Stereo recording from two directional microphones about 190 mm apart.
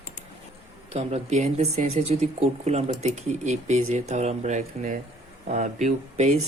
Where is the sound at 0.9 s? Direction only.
35° right (ahead or behind).